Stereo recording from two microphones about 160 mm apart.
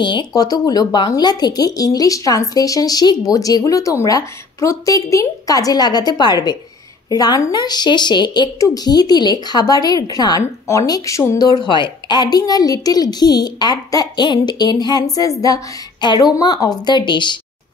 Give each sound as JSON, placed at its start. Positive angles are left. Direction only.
{"t": 0.0, "sound": "a woman's voice", "side_deg": 30}